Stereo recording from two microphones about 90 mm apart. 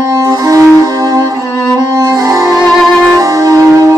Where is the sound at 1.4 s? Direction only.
35° left (ahead or behind).